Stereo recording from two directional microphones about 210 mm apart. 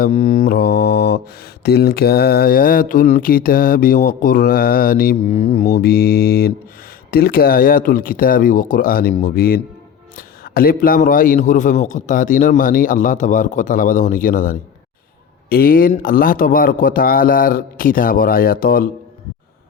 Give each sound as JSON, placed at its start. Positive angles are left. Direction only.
{"t": 0.0, "sound": "a man's voice", "side_deg": 35}
{"t": 0.4, "sound": "mantra", "side_deg": 50}
{"t": 1.6, "sound": "a man's voice", "side_deg": 50}